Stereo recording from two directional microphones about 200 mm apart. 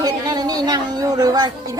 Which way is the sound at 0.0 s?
20° right (ahead or behind).